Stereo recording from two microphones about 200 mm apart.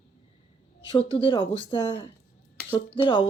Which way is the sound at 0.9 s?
25° left (ahead or behind).